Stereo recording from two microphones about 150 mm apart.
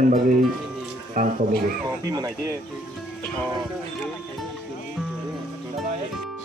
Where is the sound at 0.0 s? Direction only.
65° right (ahead or behind).